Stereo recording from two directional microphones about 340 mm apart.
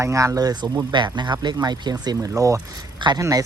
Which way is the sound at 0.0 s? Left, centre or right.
Centre.